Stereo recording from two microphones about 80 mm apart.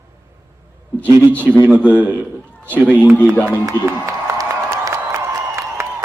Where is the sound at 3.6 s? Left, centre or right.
Right.